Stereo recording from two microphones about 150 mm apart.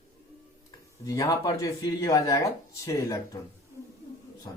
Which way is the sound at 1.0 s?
25° left (ahead or behind).